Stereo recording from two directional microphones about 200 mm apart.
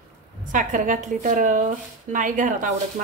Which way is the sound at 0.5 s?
40° right (ahead or behind).